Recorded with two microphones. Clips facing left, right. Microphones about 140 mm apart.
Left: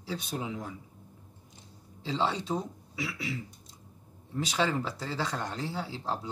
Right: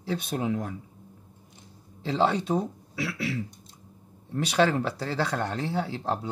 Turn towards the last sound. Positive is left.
turn(degrees=-60)  # may be behind; listen again after turning